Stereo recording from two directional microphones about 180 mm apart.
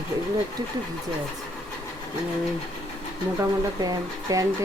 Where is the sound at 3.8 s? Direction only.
20° right (ahead or behind).